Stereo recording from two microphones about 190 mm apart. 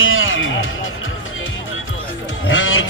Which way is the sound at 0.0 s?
90° left.